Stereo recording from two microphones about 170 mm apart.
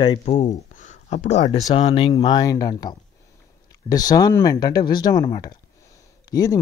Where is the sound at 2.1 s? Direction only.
25° left (ahead or behind).